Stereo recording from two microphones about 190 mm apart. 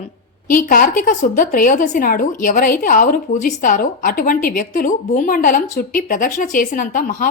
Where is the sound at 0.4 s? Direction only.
45° left (ahead or behind).